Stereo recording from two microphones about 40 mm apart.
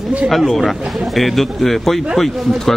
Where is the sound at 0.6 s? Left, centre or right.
Centre.